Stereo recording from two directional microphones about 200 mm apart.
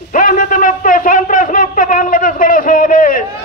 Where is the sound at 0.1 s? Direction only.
45° left (ahead or behind).